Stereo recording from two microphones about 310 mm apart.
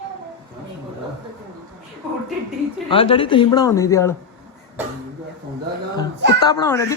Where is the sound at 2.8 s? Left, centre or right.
Centre.